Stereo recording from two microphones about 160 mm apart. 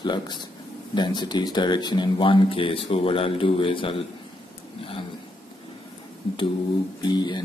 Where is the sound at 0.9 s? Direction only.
30° left (ahead or behind).